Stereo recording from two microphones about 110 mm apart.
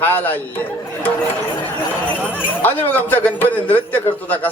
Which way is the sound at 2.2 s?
15° left (ahead or behind).